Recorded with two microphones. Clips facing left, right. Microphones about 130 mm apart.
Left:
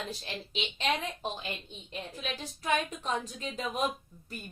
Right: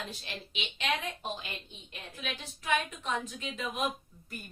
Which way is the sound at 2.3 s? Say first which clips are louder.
Left 1 dB; 40° left (ahead or behind).